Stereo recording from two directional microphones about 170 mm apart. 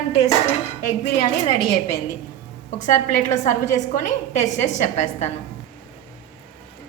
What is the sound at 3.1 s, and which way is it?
A woman's voice, 45° left (ahead or behind).